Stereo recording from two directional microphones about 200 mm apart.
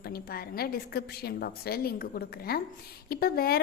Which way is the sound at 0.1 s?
50° left (ahead or behind).